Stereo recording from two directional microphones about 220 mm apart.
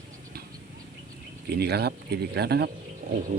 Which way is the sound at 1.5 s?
45° right (ahead or behind).